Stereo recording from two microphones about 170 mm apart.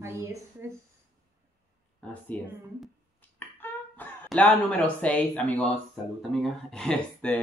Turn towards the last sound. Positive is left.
turn(degrees=10)  # may be behind; listen again after turning